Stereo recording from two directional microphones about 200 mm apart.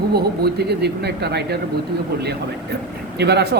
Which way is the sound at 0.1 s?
55° right (ahead or behind).